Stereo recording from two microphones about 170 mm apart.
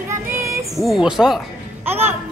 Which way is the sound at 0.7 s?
Centre (ahead or behind).